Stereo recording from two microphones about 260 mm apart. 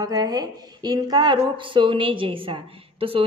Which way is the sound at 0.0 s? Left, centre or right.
Centre.